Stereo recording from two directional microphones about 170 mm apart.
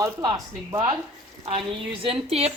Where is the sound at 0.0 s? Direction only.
20° right (ahead or behind).